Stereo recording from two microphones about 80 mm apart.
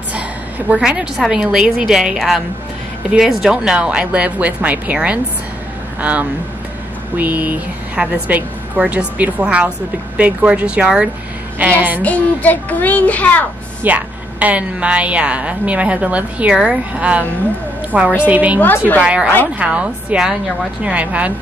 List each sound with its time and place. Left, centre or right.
0.7 s a woman's voice: centre
12.0 s a child's voice: centre
13.8 s a woman's voice: centre